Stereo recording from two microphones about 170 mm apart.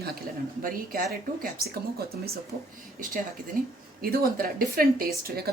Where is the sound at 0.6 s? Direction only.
55° right (ahead or behind).